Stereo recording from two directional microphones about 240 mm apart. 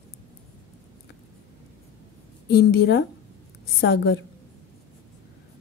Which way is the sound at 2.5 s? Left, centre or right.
Left.